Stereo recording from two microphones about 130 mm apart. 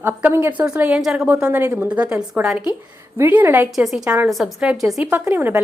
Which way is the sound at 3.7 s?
5° right (ahead or behind).